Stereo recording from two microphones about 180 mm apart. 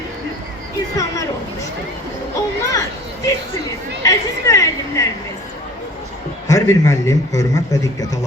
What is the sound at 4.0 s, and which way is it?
Speech, 20° left (ahead or behind).